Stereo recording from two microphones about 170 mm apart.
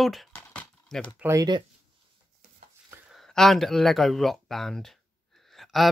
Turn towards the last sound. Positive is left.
turn(degrees=0)  # may be behind; listen again after turning